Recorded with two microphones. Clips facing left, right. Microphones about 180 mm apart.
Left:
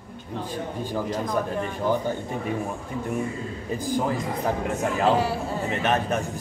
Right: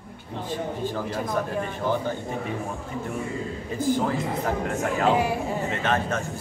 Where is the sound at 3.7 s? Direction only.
15° left (ahead or behind).